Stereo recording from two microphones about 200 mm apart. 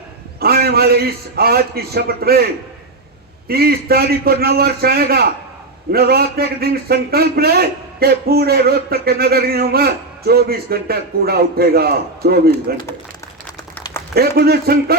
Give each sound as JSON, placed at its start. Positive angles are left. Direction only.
{"t": 0.3, "sound": "a man's voice", "side_deg": -50}
{"t": 14.1, "sound": "a man's voice", "side_deg": -50}